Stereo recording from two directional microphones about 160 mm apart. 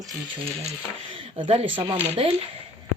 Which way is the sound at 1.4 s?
35° right (ahead or behind).